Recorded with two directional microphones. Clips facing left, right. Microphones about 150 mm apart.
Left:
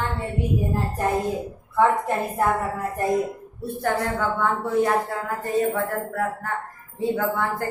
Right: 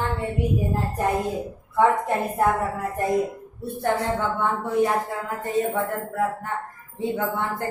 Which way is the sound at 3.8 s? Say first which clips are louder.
Right 1 dB; 25° right (ahead or behind).